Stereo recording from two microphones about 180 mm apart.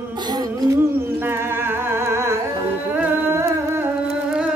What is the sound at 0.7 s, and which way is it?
Music, 10° right (ahead or behind).